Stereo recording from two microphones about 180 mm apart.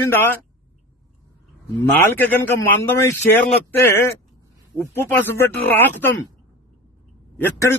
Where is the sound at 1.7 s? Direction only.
10° left (ahead or behind).